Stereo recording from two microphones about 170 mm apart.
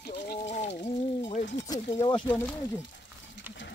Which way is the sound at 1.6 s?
20° left (ahead or behind).